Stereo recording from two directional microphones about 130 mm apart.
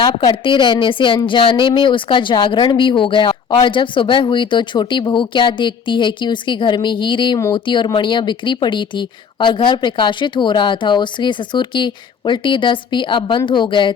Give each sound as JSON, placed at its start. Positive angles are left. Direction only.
{"t": 0.4, "sound": "speech", "side_deg": 40}